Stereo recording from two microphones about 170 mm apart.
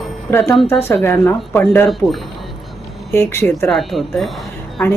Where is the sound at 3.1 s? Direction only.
15° left (ahead or behind).